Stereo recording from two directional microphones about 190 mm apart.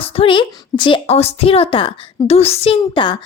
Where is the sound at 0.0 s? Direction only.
30° left (ahead or behind).